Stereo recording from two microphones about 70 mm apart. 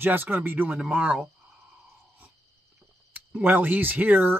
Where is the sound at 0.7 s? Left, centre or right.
Centre.